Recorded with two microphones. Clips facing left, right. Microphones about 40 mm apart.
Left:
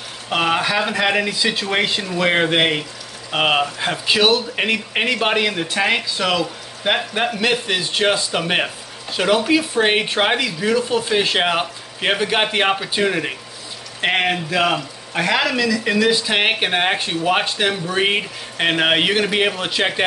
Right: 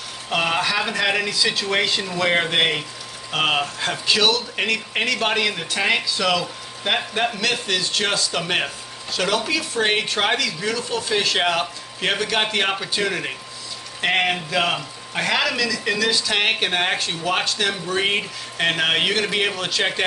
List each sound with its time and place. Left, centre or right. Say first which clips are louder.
0.3 s speech: left 3 dB; centre